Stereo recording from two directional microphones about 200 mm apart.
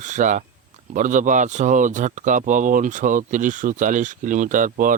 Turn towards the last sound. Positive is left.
turn(degrees=-40)  # may be behind; listen again after turning